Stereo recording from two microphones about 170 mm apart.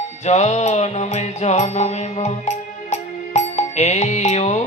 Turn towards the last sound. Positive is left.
turn(degrees=40)  # may be behind; listen again after turning